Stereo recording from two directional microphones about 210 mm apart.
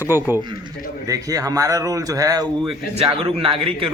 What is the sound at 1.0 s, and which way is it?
A man's voice, 15° right (ahead or behind).